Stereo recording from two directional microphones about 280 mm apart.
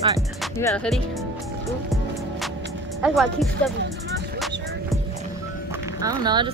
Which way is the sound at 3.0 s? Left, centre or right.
Centre.